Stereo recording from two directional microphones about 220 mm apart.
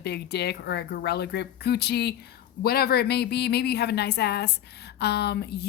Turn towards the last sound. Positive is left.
turn(degrees=50)  # may be behind; listen again after turning